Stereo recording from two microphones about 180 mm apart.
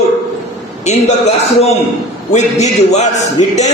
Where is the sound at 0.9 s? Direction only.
40° left (ahead or behind).